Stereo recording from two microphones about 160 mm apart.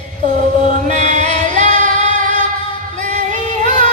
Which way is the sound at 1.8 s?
45° right (ahead or behind).